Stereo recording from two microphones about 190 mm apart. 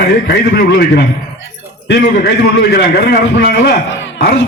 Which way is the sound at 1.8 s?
65° left (ahead or behind).